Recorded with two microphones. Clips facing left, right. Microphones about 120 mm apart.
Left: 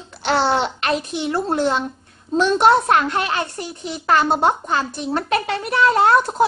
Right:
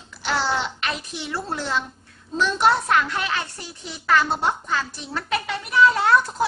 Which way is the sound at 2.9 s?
45° left (ahead or behind).